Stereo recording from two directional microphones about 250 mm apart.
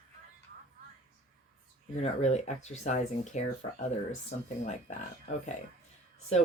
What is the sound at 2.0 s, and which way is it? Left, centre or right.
Speech, left.